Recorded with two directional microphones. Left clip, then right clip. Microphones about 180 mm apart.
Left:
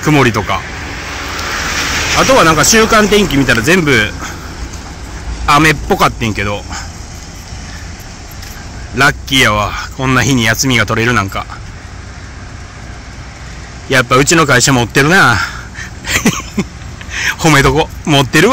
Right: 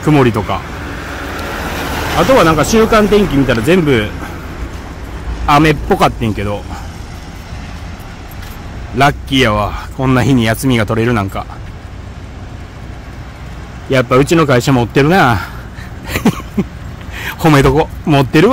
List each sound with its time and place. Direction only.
0.0 s speech: centre (ahead or behind)
0.7 s vehicle: 60° right (ahead or behind); by 2.1 s 40° right (ahead or behind)
2.1 s speech: 10° left (ahead or behind)
5.5 s speech: centre (ahead or behind)
8.9 s speech: 5° right (ahead or behind)
13.8 s speech: centre (ahead or behind)
16.1 s a sound: 5° right (ahead or behind)
17.1 s speech: 10° right (ahead or behind)